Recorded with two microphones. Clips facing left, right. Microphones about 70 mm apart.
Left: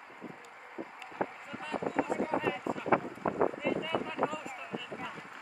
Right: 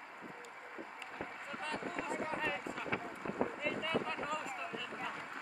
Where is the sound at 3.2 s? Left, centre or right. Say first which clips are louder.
Left 9 dB; left.